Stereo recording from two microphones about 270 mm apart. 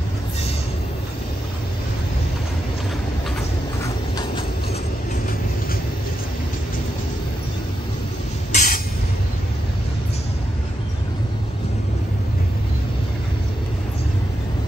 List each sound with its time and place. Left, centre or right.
8.5 s train: left